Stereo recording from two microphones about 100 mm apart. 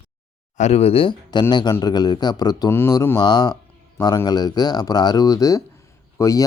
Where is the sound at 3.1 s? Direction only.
45° left (ahead or behind).